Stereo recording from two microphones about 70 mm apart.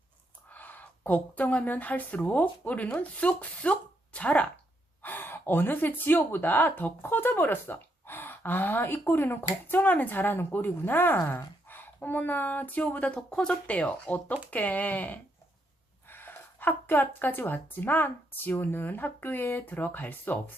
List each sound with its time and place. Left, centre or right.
0.5 s speech: left